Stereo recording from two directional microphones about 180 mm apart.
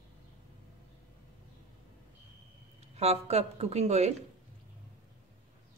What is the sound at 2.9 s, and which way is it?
A woman's voice, 35° right (ahead or behind).